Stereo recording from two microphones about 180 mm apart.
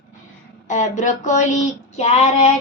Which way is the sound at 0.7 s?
40° left (ahead or behind).